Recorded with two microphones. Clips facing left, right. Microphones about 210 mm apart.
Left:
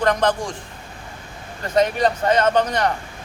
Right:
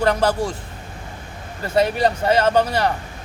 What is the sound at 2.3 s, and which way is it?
Speech, 10° right (ahead or behind).